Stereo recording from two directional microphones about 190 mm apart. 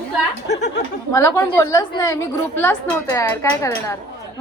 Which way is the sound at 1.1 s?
15° left (ahead or behind).